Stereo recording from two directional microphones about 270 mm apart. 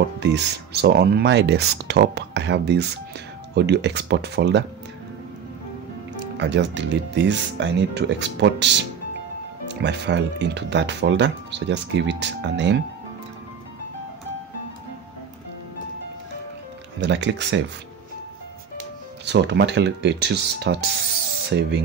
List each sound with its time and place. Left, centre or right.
0.2 s speech: right
6.3 s speech: right
17.0 s speech: right
19.2 s speech: right